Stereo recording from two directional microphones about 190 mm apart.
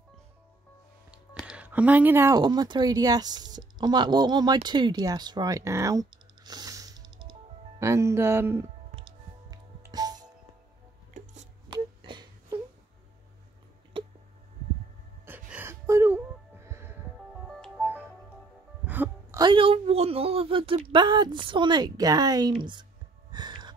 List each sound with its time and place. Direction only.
1.1 s speech: 5° right (ahead or behind)
8.9 s music: 25° right (ahead or behind)
11.7 s a sound: 25° right (ahead or behind)
13.9 s a sound: 25° right (ahead or behind)
15.2 s music: 10° right (ahead or behind)
17.5 s music: 5° left (ahead or behind)
18.9 s music: 10° right (ahead or behind)
19.4 s a woman's voice: 25° right (ahead or behind)
23.3 s music: 20° right (ahead or behind)